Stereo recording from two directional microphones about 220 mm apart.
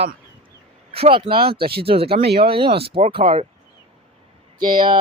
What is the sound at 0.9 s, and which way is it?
Speech, 25° right (ahead or behind).